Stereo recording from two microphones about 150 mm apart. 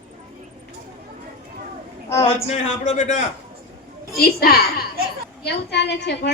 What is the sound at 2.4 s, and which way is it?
Speech, 50° left (ahead or behind).